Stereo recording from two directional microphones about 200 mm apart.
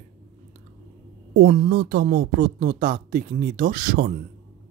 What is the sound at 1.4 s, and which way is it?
Speech, 55° right (ahead or behind).